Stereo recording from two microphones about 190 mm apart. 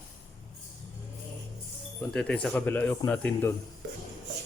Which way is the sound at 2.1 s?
5° left (ahead or behind).